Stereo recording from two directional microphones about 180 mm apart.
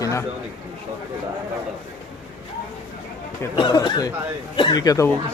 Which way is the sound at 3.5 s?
25° left (ahead or behind).